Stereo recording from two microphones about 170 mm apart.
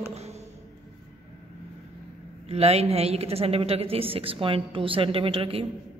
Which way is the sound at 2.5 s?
35° right (ahead or behind).